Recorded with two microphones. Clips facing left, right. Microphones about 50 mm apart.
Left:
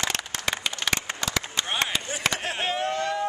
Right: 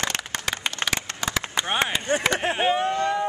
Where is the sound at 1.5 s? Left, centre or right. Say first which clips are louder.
Right 4 dB; centre.